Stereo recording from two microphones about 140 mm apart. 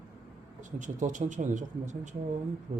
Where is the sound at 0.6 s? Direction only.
65° right (ahead or behind).